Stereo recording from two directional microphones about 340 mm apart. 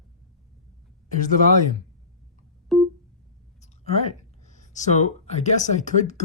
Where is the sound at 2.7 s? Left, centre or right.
Centre.